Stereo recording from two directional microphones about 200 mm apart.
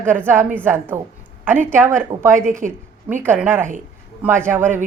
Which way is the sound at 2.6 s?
40° right (ahead or behind).